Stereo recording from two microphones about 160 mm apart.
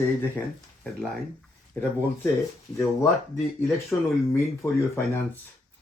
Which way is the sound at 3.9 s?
15° left (ahead or behind).